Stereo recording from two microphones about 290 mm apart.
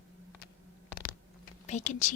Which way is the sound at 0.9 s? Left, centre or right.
Left.